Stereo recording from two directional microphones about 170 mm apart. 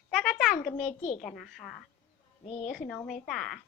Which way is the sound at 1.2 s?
Centre (ahead or behind).